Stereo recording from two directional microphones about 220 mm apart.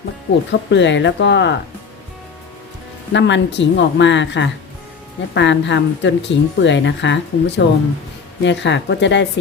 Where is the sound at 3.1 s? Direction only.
55° left (ahead or behind).